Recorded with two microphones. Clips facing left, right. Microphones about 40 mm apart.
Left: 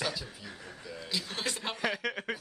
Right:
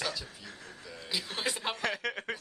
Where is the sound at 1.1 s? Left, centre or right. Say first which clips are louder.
Right 1 dB; centre.